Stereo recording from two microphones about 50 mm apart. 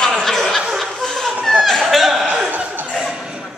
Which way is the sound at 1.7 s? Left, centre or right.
Centre.